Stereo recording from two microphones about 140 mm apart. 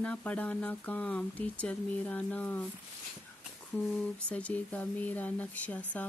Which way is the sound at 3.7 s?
10° left (ahead or behind).